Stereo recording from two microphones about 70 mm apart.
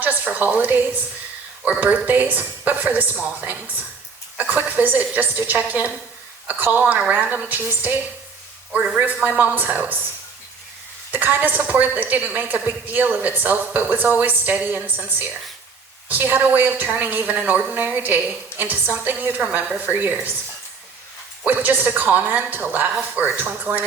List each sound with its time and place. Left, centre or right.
0.0 s a woman's voice: right
11.1 s a woman's voice: right
21.4 s a woman's voice: right